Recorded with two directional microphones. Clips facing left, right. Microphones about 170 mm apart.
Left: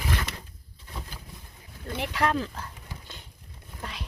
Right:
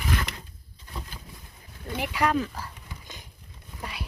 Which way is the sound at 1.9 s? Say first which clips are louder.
Right 1 dB; 10° right (ahead or behind).